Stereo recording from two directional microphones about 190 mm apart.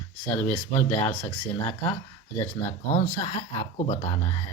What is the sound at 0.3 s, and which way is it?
Speech, 35° left (ahead or behind).